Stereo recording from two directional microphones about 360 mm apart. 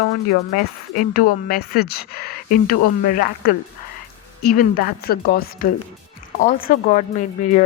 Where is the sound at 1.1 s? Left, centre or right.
Left.